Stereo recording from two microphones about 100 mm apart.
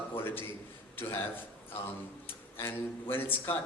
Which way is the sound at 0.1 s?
20° left (ahead or behind).